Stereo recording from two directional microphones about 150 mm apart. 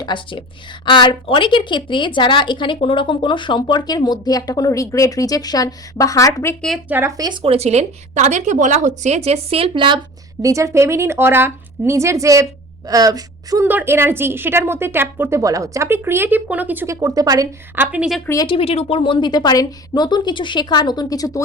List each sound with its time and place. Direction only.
0.0 s speech: 30° left (ahead or behind)
6.8 s a woman's voice: 15° right (ahead or behind)
7.4 s a woman's voice: 45° right (ahead or behind)
10.4 s a woman's voice: 20° right (ahead or behind)
17.7 s a woman's voice: 5° right (ahead or behind)
18.4 s a woman's voice: 40° left (ahead or behind); by 21.4 s 25° left (ahead or behind)